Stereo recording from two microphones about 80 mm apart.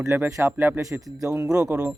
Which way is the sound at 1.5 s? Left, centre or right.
Centre.